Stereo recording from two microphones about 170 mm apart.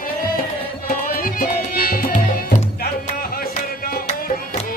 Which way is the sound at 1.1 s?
55° left (ahead or behind).